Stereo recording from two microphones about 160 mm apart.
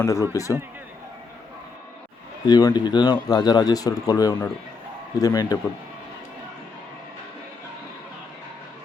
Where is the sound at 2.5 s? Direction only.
25° left (ahead or behind).